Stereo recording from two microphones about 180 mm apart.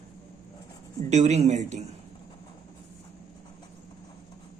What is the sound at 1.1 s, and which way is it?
Speech, 40° right (ahead or behind).